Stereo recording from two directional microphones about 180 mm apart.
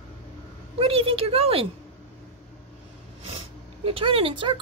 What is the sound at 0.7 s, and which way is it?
Speech, 30° right (ahead or behind).